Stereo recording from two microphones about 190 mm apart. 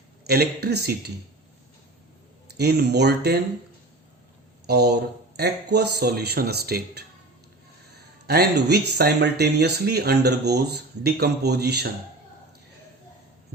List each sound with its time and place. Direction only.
0.3 s speech: 55° right (ahead or behind)
2.5 s speech: 60° right (ahead or behind)
4.6 s speech: 60° right (ahead or behind)
8.3 s speech: 60° right (ahead or behind)